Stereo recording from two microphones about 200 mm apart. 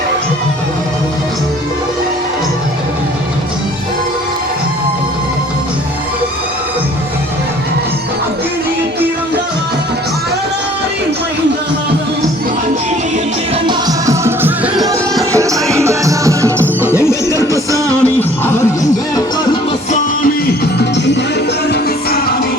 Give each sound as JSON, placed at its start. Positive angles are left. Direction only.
{"t": 13.7, "sound": "music", "side_deg": -20}
{"t": 15.3, "sound": "music", "side_deg": -15}
{"t": 16.9, "sound": "music", "side_deg": 15}
{"t": 17.7, "sound": "music", "side_deg": -15}
{"t": 20.7, "sound": "music", "side_deg": 60}